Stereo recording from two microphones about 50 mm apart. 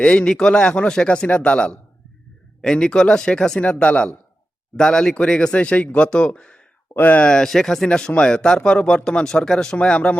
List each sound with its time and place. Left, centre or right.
0.0 s speech: left
3.6 s speech: left
6.9 s speech: left
7.2 s speech: centre